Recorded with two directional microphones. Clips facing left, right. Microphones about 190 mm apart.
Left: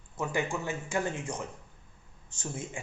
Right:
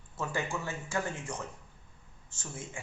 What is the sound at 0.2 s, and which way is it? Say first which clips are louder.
Speech: left 3 dB; 15° left (ahead or behind).